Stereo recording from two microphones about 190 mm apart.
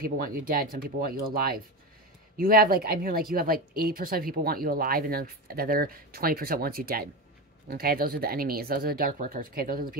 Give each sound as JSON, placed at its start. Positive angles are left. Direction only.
{"t": 0.0, "sound": "a woman's voice", "side_deg": -50}